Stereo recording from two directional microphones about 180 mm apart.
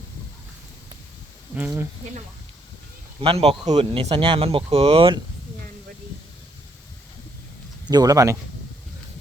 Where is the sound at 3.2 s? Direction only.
30° right (ahead or behind).